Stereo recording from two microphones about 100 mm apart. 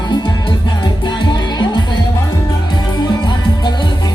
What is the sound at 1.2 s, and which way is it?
Music, 50° left (ahead or behind).